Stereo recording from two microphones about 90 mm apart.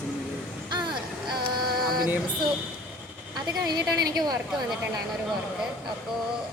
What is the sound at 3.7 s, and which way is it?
Speech, 50° right (ahead or behind).